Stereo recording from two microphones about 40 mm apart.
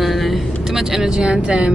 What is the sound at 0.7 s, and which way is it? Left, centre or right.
Speech, centre.